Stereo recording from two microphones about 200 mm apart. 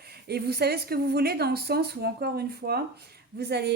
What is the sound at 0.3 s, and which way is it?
A woman's voice, 55° right (ahead or behind).